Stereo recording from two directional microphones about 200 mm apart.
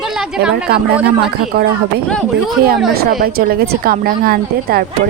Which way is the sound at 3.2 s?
50° right (ahead or behind).